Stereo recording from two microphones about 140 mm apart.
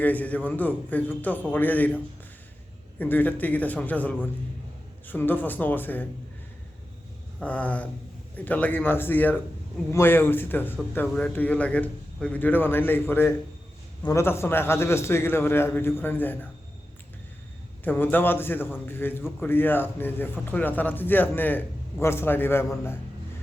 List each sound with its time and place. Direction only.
0.0 s a man's voice: 10° left (ahead or behind)
3.0 s a man's voice: 10° left (ahead or behind)
7.3 s a man's voice: 10° left (ahead or behind)
17.8 s a man's voice: 15° left (ahead or behind)